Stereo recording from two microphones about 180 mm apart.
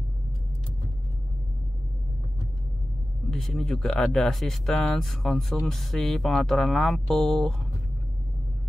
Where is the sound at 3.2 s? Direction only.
Centre (ahead or behind).